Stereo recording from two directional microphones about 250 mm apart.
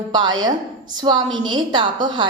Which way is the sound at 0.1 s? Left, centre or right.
Centre.